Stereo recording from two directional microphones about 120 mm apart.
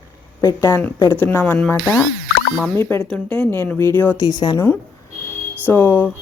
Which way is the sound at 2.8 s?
20° left (ahead or behind).